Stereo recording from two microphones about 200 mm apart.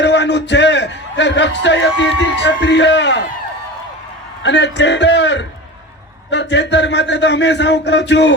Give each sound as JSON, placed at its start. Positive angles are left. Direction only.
{"t": 0.0, "sound": "a sound", "side_deg": 60}
{"t": 2.3, "sound": "a man's voice", "side_deg": 60}
{"t": 4.4, "sound": "a man's voice", "side_deg": 60}